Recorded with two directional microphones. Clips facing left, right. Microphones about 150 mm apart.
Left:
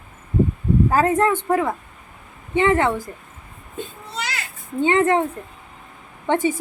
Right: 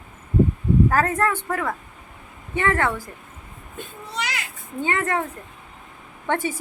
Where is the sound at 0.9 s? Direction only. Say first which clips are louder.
Left 3 dB; 20° left (ahead or behind).